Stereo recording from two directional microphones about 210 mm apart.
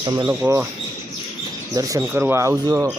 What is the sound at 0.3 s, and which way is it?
Speech, 10° right (ahead or behind).